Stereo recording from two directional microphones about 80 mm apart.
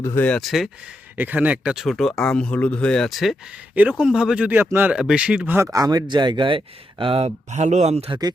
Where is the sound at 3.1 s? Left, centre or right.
Centre.